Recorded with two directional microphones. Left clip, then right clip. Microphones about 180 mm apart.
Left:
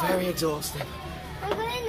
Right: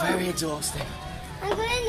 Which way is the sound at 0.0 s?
Centre (ahead or behind).